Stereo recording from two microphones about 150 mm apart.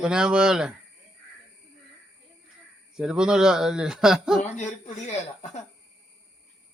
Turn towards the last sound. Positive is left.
turn(degrees=50)  # may be behind; listen again after turning